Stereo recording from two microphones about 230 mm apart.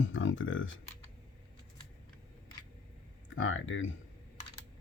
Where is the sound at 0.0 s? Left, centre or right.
Left.